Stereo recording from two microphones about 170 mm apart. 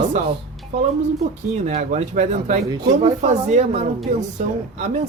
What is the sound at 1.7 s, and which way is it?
Speech, 45° right (ahead or behind).